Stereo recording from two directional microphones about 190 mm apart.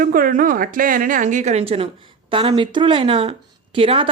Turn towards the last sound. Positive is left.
turn(degrees=-30)  # may be behind; listen again after turning